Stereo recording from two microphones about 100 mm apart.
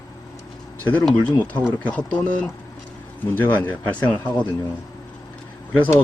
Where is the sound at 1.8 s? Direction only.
10° left (ahead or behind).